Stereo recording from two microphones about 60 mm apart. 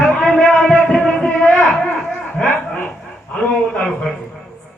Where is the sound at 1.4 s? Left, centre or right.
Left.